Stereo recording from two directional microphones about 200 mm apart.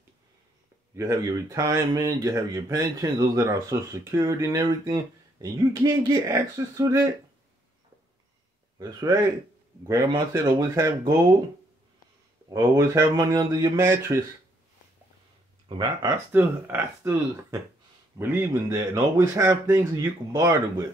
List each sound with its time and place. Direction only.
0.9 s speech: 15° right (ahead or behind)
8.7 s speech: 20° right (ahead or behind)
12.4 s speech: 15° right (ahead or behind)
16.3 s speech: 10° right (ahead or behind)